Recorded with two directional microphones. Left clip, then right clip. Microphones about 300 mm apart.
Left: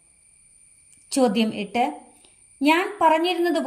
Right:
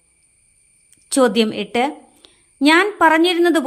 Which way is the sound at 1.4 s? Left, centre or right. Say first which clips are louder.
Right 5 dB; centre.